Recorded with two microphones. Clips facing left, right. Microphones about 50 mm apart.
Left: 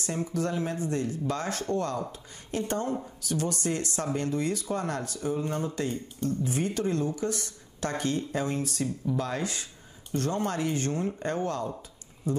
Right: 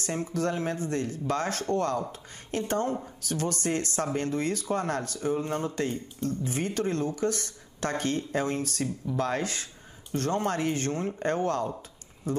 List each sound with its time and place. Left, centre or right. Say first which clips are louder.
0.0 s a woman's voice: right 1 dB; right